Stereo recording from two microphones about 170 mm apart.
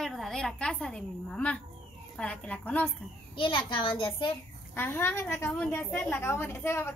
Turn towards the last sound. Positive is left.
turn(degrees=15)  # may be behind; listen again after turning